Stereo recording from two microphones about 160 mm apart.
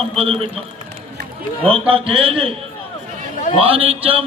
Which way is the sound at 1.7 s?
35° right (ahead or behind).